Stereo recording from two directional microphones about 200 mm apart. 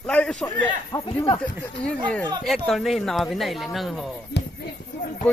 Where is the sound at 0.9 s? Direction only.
20° left (ahead or behind).